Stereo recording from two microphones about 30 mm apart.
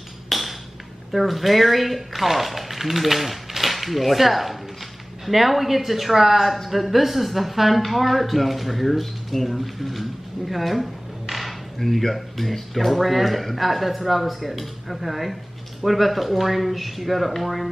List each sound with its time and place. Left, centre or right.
0.3 s ping: centre
1.1 s speech: centre